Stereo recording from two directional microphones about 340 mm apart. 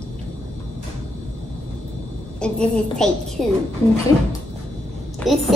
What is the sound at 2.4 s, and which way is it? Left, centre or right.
A woman's voice, centre.